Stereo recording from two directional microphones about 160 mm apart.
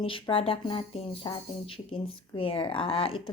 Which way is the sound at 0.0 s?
35° left (ahead or behind).